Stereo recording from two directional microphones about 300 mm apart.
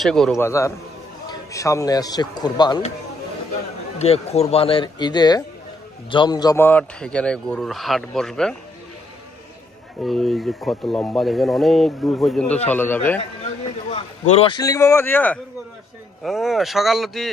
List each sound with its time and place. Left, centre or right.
0.0 s a man's voice: centre
4.0 s a man's voice: left; by 8.5 s centre
10.0 s speech: centre
13.4 s a man's voice: centre